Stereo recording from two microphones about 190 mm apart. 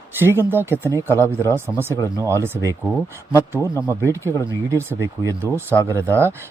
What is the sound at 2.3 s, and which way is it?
Speech, 15° right (ahead or behind).